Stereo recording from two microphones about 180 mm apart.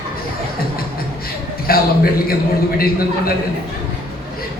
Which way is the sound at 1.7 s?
55° left (ahead or behind).